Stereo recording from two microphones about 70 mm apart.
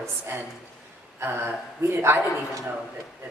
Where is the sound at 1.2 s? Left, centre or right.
Right.